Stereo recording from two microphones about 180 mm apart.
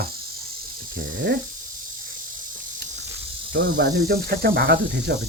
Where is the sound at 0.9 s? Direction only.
70° right (ahead or behind).